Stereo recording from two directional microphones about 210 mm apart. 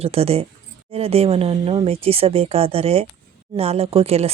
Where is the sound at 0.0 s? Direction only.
30° right (ahead or behind).